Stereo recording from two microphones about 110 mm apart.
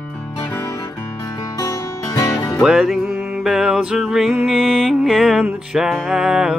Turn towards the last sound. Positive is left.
turn(degrees=-5)  # may be behind; listen again after turning